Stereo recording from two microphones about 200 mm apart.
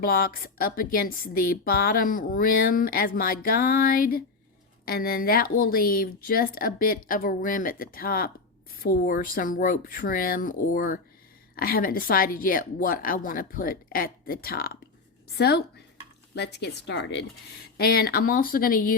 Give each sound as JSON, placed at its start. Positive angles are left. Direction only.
{"t": 0.0, "sound": "speech", "side_deg": 45}